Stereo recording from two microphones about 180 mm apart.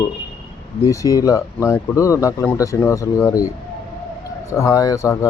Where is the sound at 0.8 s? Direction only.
20° left (ahead or behind).